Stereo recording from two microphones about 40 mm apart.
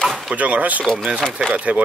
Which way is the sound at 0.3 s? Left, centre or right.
Right.